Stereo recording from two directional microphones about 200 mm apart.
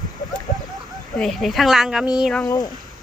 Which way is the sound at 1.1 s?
Centre (ahead or behind).